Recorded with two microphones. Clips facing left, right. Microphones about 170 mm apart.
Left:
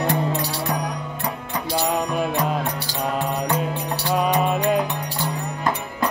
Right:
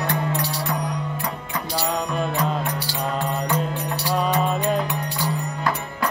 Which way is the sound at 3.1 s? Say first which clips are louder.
Left 1 dB; 15° left (ahead or behind).